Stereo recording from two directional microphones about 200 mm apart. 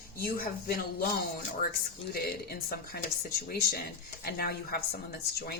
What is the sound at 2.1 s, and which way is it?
Speech, 50° left (ahead or behind).